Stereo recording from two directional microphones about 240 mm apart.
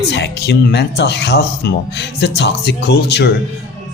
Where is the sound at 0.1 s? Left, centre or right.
Left.